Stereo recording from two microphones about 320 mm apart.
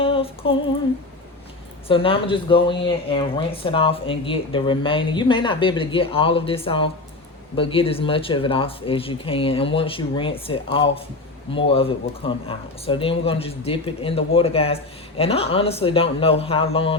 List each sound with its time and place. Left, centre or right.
0.0 s female singing: centre
1.9 s speech: centre